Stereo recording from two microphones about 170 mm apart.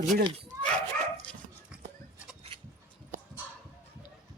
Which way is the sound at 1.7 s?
5° right (ahead or behind).